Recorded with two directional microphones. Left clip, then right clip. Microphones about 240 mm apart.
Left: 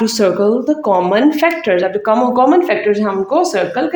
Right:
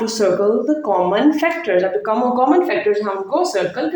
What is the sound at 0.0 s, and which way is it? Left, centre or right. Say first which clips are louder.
Speech: left 3 dB; left.